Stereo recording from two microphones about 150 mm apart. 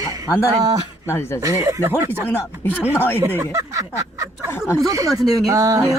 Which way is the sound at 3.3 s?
20° right (ahead or behind).